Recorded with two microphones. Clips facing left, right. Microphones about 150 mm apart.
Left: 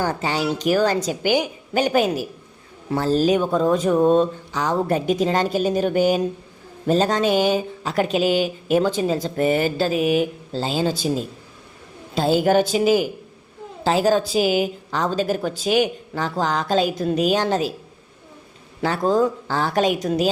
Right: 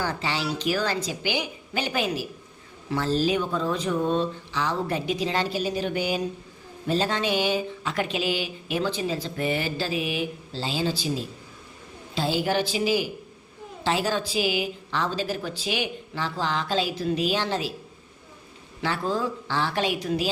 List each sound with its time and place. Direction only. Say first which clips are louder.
0.0 s speech: left 6 dB; 45° left (ahead or behind)
18.8 s speech: left 8 dB; 40° left (ahead or behind)